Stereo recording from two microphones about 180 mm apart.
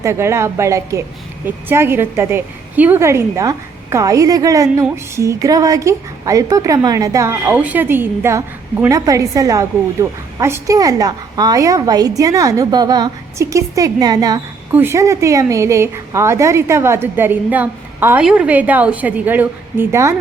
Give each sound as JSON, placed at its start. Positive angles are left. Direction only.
{"t": 0.0, "sound": "a woman's voice", "side_deg": -15}